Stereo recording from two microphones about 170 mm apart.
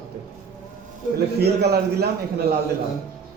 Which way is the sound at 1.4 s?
70° right (ahead or behind).